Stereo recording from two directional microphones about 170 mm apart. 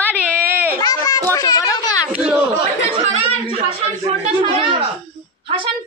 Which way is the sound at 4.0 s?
35° right (ahead or behind).